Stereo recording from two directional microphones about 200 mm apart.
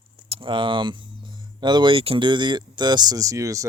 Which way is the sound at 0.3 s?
25° right (ahead or behind).